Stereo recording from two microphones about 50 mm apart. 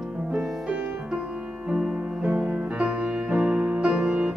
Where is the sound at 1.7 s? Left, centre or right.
Centre.